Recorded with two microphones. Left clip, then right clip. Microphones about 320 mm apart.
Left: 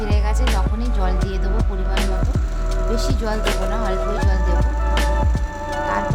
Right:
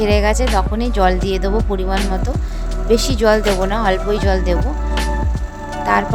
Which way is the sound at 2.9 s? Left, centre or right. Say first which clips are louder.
Right 13 dB; right.